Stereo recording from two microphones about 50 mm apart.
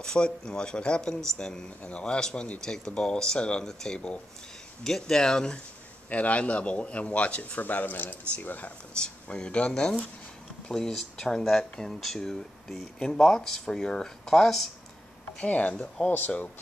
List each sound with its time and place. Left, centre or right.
0.0 s speech: centre
6.0 s speech: left
8.9 s speech: centre
15.3 s speech: left